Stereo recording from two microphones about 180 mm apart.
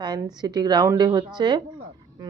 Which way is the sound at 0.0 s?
20° right (ahead or behind).